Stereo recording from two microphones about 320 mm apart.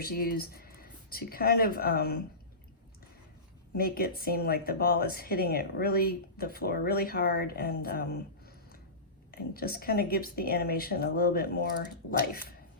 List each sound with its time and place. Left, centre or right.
0.0 s speech: left
3.8 s speech: left